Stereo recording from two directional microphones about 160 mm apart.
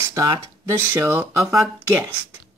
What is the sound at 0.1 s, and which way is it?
Speech, 20° right (ahead or behind).